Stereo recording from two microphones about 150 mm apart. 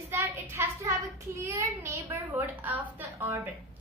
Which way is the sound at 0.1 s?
15° right (ahead or behind).